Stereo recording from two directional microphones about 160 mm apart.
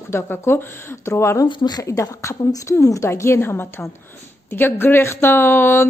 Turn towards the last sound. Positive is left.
turn(degrees=15)  # may be behind; listen again after turning